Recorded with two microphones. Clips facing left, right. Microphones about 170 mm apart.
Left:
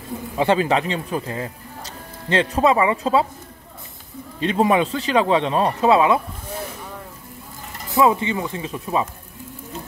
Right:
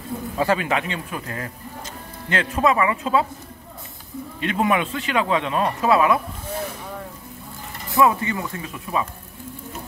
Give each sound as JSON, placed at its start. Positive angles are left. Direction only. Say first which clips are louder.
{"t": 0.4, "sound": "speech", "louder": "left 4 dB", "side_deg": 30}
{"t": 4.4, "sound": "speech", "louder": "left 4 dB", "side_deg": 30}
{"t": 7.9, "sound": "speech", "louder": "left 1 dB", "side_deg": 20}